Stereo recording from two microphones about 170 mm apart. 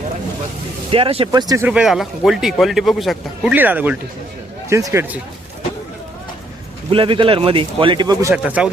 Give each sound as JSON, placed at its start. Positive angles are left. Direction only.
{"t": 0.9, "sound": "a man's voice", "side_deg": -35}
{"t": 1.6, "sound": "a man's voice", "side_deg": -5}
{"t": 3.5, "sound": "speech", "side_deg": -10}
{"t": 6.9, "sound": "a man's voice", "side_deg": -30}
{"t": 8.3, "sound": "speech", "side_deg": -10}